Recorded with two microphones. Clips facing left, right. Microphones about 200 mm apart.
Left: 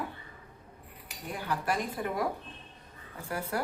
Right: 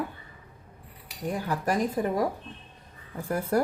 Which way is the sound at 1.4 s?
40° right (ahead or behind).